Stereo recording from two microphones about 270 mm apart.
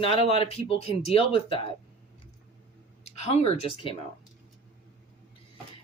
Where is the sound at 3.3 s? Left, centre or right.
Centre.